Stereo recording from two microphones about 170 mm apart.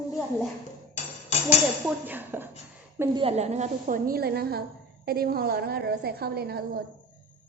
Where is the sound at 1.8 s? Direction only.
10° right (ahead or behind).